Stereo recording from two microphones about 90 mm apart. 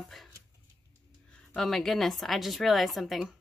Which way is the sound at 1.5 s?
5° left (ahead or behind).